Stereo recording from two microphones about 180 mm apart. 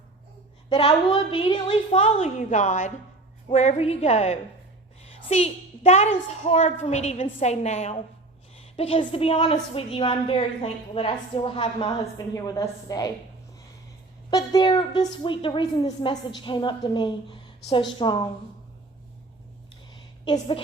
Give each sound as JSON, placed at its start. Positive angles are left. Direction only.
{"t": 0.7, "sound": "a woman's voice", "side_deg": 30}
{"t": 12.3, "sound": "a woman's voice", "side_deg": 20}
{"t": 14.3, "sound": "a woman's voice", "side_deg": 25}
{"t": 20.2, "sound": "a woman's voice", "side_deg": 25}